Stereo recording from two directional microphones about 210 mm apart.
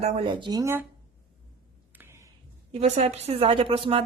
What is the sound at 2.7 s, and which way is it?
A woman's voice, 30° right (ahead or behind).